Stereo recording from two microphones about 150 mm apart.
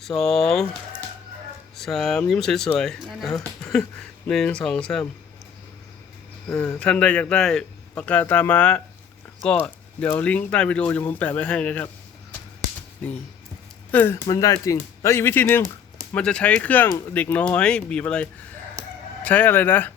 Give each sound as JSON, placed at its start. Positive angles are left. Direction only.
{"t": 0.0, "sound": "speech", "side_deg": 5}
{"t": 6.7, "sound": "a man's voice", "side_deg": 5}
{"t": 13.9, "sound": "a man's voice", "side_deg": 15}
{"t": 14.3, "sound": "a man's voice", "side_deg": 25}